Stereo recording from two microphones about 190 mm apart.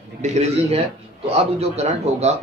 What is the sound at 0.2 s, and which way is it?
A man's voice, 35° right (ahead or behind).